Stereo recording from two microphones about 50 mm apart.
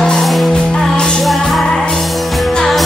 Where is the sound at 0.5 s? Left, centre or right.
Centre.